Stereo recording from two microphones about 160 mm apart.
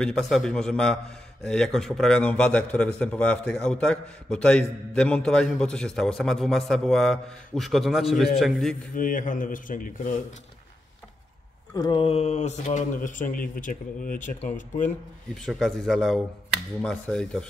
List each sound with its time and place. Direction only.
0.0 s a man's voice: centre (ahead or behind)
8.9 s speech: 60° left (ahead or behind)
11.7 s speech: 25° left (ahead or behind); by 14.3 s 55° left (ahead or behind)
15.3 s a man's voice: centre (ahead or behind)